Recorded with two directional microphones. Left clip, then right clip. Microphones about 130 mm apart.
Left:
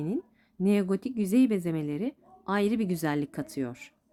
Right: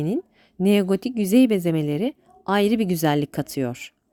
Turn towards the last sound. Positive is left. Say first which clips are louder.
# right 8 dB
turn(degrees=-65)  # may be behind; listen again after turning